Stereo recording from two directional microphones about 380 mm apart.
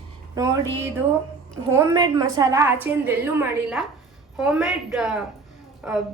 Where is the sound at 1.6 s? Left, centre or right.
Centre.